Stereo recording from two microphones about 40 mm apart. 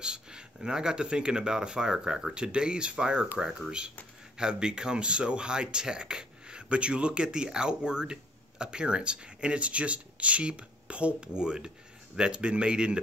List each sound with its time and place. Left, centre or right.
0.0 s speech: right